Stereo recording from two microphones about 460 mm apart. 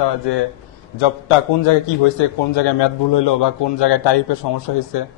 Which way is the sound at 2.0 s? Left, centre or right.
Left.